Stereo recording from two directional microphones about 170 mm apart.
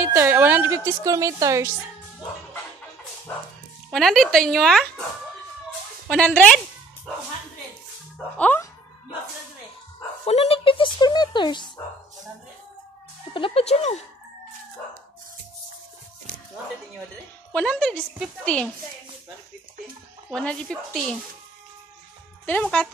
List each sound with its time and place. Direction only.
0.0 s a woman's voice: 10° right (ahead or behind)
3.9 s speech: centre (ahead or behind)
6.0 s speech: 5° left (ahead or behind)
8.4 s speech: 10° left (ahead or behind)
10.2 s speech: 35° left (ahead or behind)
13.3 s speech: 30° left (ahead or behind)
17.5 s speech: 10° left (ahead or behind)
20.2 s speech: 5° left (ahead or behind)
22.5 s speech: 5° left (ahead or behind)